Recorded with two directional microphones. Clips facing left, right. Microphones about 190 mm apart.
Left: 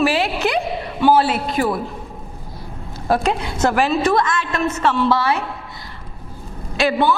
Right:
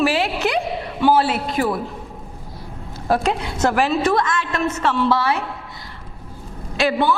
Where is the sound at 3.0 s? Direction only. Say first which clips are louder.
Left 1 dB; 15° left (ahead or behind).